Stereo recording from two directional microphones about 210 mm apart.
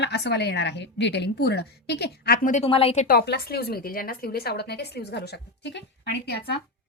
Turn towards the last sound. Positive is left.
turn(degrees=50)  # may be behind; listen again after turning